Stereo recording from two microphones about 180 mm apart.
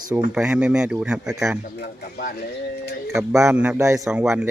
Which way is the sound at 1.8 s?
60° left (ahead or behind).